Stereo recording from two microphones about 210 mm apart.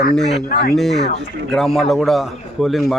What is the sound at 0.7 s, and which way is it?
Speech, centre (ahead or behind).